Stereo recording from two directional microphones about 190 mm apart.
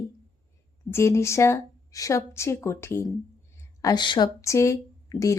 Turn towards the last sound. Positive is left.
turn(degrees=15)  # may be behind; listen again after turning